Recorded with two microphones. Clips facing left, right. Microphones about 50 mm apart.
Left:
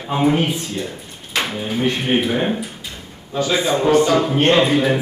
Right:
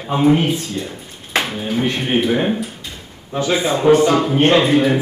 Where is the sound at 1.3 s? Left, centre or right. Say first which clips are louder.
Right 2 dB; right.